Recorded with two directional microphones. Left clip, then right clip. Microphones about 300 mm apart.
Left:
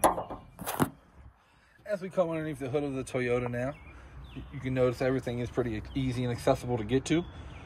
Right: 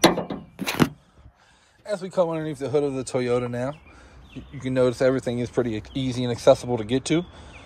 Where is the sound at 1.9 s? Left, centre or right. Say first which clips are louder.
Right 6 dB; centre.